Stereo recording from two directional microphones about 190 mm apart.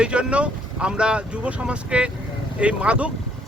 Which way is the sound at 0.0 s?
5° right (ahead or behind).